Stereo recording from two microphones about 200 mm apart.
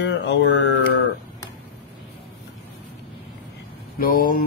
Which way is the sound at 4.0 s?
45° left (ahead or behind).